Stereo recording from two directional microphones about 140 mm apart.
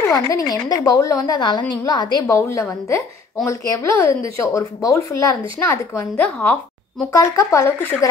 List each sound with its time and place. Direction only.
0.1 s a woman's voice: 25° left (ahead or behind); by 7.1 s 10° left (ahead or behind)
7.1 s a woman's voice: 20° left (ahead or behind)